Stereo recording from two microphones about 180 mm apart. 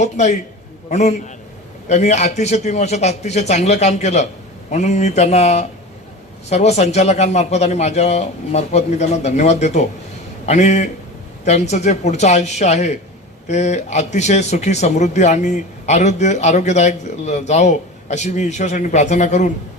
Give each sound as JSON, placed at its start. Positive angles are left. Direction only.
{"t": 0.0, "sound": "a man's voice", "side_deg": 40}